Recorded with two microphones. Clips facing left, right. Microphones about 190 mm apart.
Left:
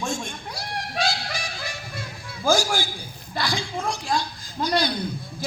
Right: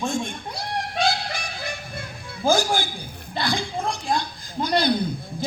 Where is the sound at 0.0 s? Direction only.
55° right (ahead or behind).